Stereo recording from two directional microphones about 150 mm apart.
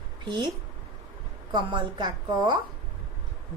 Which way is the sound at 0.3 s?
30° right (ahead or behind).